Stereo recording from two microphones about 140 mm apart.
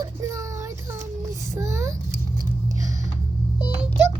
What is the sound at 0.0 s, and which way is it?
Child singing, 20° right (ahead or behind).